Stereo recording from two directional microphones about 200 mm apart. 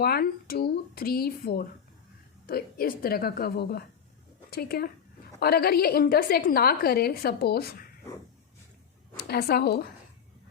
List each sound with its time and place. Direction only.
0.0 s a woman's voice: 50° left (ahead or behind)
9.1 s a woman's voice: 50° left (ahead or behind)